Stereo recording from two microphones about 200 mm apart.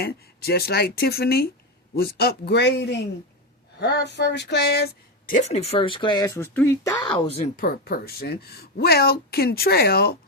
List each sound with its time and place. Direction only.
0.0 s speech: 50° left (ahead or behind)
2.0 s a sound: 50° left (ahead or behind)
5.3 s speech: 35° left (ahead or behind)
7.5 s speech: 45° left (ahead or behind)